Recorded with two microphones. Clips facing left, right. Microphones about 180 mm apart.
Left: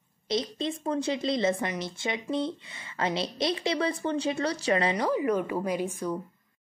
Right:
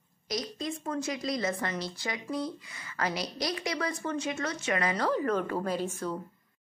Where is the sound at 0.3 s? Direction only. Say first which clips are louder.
Left 5 dB; 25° left (ahead or behind).